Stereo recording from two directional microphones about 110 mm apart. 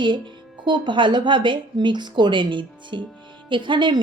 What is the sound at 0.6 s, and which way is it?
A woman's voice, 45° right (ahead or behind).